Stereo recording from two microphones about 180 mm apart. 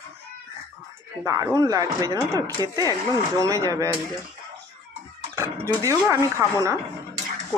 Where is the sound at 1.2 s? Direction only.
20° right (ahead or behind).